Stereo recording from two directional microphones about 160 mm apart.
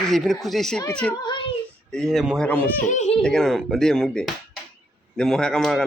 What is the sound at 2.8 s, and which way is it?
Speech, 50° left (ahead or behind).